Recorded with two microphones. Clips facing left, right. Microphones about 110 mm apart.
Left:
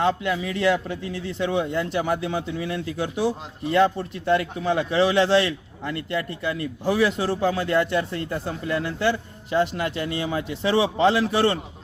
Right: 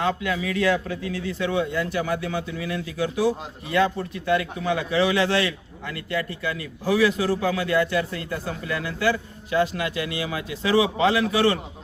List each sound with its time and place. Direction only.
0.0 s a man's voice: 30° left (ahead or behind)